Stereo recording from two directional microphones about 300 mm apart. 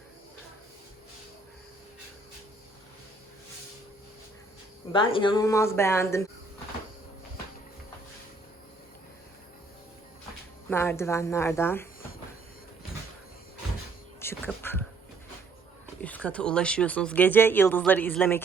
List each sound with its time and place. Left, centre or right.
4.9 s speech: centre
10.7 s speech: centre
14.2 s whispering: centre
16.0 s speech: centre